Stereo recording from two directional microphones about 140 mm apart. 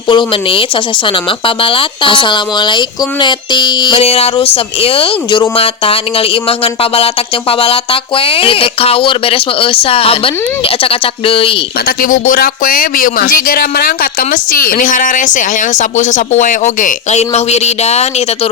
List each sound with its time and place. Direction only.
0.1 s speech: 40° left (ahead or behind)
11.9 s speech: 75° left (ahead or behind); by 18.1 s 50° left (ahead or behind)